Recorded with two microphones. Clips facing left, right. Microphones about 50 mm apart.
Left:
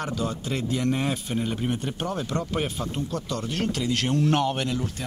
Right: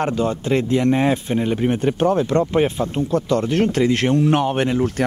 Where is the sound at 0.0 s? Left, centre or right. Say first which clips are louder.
Right 9 dB; right.